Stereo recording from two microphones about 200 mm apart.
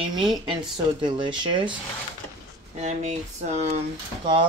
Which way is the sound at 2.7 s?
35° right (ahead or behind).